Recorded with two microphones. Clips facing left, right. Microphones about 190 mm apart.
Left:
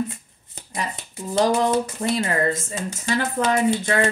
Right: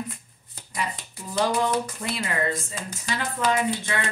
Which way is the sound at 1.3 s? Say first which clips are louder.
Left 5 dB; 30° left (ahead or behind).